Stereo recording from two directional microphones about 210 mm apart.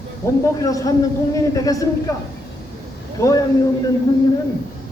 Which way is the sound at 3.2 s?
15° left (ahead or behind).